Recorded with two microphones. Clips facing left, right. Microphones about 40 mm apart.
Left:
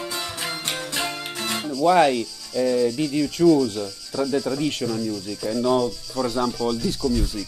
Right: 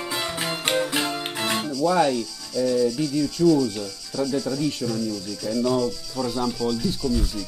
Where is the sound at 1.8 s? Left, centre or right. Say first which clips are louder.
Left 4 dB; left.